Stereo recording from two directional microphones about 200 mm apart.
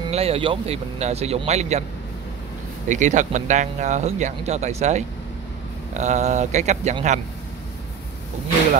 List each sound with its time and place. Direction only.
0.1 s speech: 30° right (ahead or behind)
2.9 s speech: 40° right (ahead or behind)